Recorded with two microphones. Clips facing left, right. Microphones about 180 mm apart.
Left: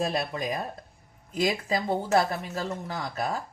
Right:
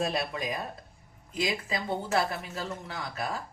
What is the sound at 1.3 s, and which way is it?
Speech, 45° left (ahead or behind).